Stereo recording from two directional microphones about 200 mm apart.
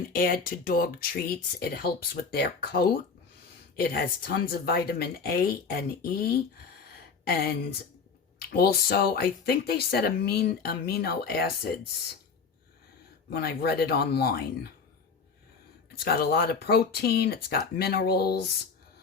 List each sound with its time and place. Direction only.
0.1 s speech: 45° left (ahead or behind)
6.9 s a sound: 50° left (ahead or behind)
8.4 s speech: 50° left (ahead or behind)
13.3 s speech: 50° left (ahead or behind)
16.0 s speech: 50° left (ahead or behind)